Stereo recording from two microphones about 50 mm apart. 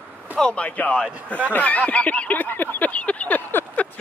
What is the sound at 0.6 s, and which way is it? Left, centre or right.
Speech, left.